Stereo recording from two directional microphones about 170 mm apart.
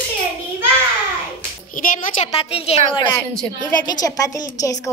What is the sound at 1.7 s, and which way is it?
Music, 50° left (ahead or behind).